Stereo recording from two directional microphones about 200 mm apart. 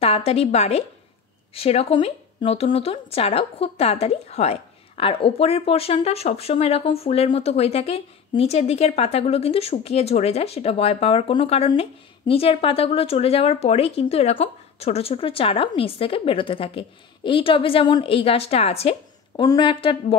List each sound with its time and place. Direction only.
0.0 s a woman's voice: 30° left (ahead or behind)